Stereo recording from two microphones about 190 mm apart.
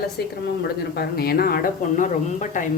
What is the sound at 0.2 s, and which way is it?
Speech, 55° left (ahead or behind).